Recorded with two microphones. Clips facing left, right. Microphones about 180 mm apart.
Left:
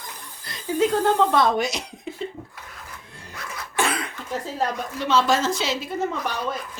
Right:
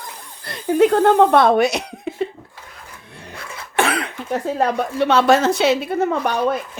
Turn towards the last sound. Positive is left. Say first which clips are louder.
# right 8 dB
turn(degrees=-60)  # may be behind; listen again after turning